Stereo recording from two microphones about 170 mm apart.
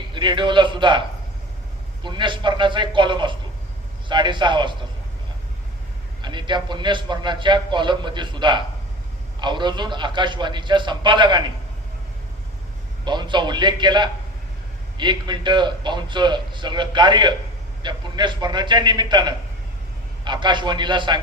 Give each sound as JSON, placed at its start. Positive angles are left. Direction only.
{"t": 0.1, "sound": "a man's voice", "side_deg": -30}
{"t": 2.0, "sound": "a man's voice", "side_deg": -30}
{"t": 6.2, "sound": "a man's voice", "side_deg": -25}
{"t": 13.1, "sound": "a man's voice", "side_deg": -25}